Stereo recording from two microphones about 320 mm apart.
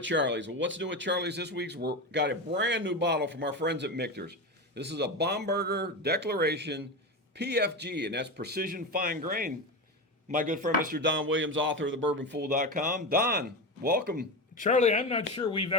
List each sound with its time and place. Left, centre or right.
0.0 s speech: right
14.5 s speech: left